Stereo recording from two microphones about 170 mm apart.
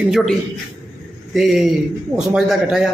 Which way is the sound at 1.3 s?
Centre (ahead or behind).